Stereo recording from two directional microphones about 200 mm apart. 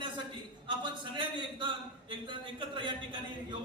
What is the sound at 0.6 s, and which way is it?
A man's voice, 25° right (ahead or behind).